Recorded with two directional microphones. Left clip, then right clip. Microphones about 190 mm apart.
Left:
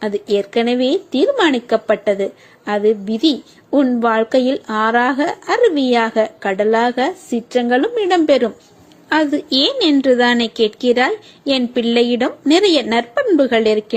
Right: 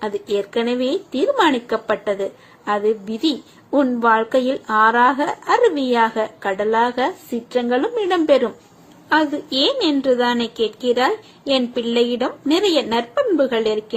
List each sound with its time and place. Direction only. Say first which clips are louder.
0.0 s speech: left 4 dB; 30° left (ahead or behind)